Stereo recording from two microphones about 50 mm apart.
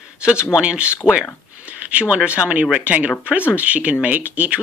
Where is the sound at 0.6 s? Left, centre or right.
Right.